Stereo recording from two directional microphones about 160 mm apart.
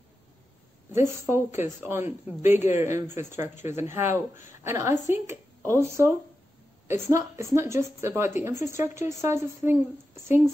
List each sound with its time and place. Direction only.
0.9 s speech: 15° right (ahead or behind)